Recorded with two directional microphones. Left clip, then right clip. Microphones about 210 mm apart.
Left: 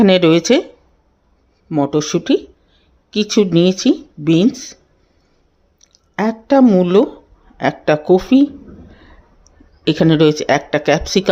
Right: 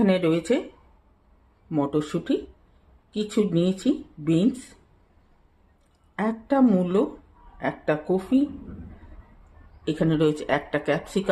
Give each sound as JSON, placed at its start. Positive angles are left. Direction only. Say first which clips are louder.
{"t": 0.0, "sound": "speech", "louder": "left 11 dB", "side_deg": 45}
{"t": 1.7, "sound": "speech", "louder": "left 9 dB", "side_deg": 35}
{"t": 6.1, "sound": "speech", "louder": "left 10 dB", "side_deg": 35}
{"t": 9.8, "sound": "speech", "louder": "left 11 dB", "side_deg": 40}